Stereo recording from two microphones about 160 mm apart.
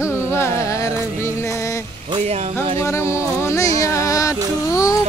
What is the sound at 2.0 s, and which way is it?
Music, 35° right (ahead or behind).